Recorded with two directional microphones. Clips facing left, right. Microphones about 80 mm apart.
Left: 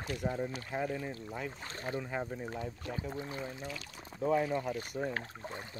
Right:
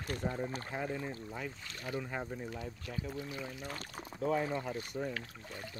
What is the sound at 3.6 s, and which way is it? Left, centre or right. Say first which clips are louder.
Speech: left 1 dB; right.